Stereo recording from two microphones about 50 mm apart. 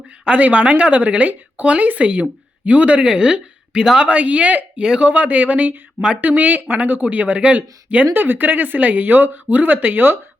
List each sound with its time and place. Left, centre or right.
0.3 s speech: right
4.0 s speech: right